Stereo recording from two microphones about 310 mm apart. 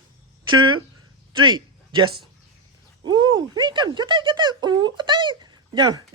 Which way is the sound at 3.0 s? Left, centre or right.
Centre.